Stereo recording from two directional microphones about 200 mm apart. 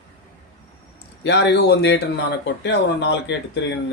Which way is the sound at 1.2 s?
60° left (ahead or behind).